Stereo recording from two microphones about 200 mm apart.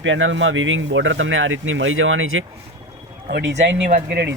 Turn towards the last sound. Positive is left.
turn(degrees=-55)  # may be behind; listen again after turning